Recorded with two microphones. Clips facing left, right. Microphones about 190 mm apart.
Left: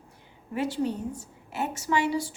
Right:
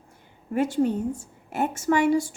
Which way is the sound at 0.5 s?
50° right (ahead or behind).